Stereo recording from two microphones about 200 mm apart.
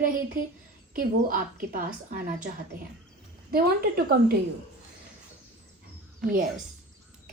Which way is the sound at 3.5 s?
50° right (ahead or behind).